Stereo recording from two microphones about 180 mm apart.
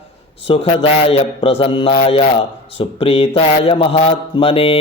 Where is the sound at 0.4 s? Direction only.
30° left (ahead or behind).